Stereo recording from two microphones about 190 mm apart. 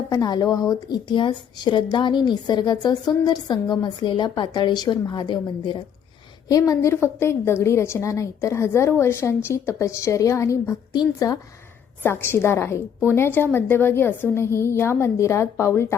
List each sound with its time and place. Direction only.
0.1 s a woman's voice: 20° left (ahead or behind)